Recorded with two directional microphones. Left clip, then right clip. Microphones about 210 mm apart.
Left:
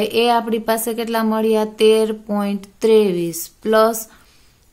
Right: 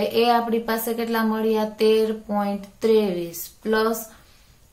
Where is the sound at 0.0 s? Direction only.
50° left (ahead or behind).